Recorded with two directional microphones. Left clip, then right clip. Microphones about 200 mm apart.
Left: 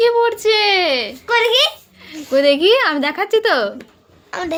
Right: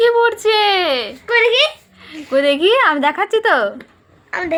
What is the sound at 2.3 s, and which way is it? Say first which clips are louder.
A woman's voice: left 1 dB; 10° left (ahead or behind).